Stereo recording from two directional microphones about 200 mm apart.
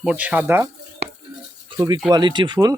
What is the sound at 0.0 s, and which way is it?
Speech, 5° right (ahead or behind).